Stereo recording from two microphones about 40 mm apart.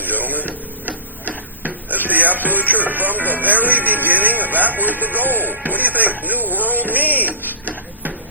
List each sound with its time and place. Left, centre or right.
0.0 s radio: right
1.6 s speech: right